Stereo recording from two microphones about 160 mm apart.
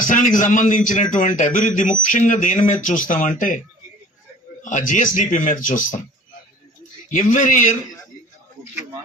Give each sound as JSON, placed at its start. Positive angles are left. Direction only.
{"t": 0.0, "sound": "speech", "side_deg": 55}
{"t": 4.6, "sound": "speech", "side_deg": 55}
{"t": 7.1, "sound": "speech", "side_deg": 55}